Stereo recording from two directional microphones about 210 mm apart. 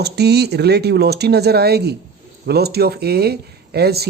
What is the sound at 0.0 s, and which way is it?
Speech, 50° right (ahead or behind).